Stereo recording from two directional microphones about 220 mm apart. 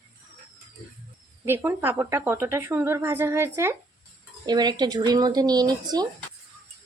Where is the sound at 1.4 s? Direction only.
10° right (ahead or behind).